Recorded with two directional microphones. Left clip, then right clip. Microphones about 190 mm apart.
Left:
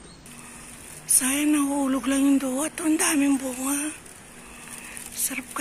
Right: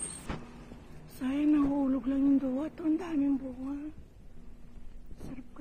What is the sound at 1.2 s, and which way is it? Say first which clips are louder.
Speech: left 5 dB; 10° left (ahead or behind).